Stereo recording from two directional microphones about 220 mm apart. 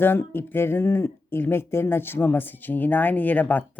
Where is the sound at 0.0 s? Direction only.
10° left (ahead or behind).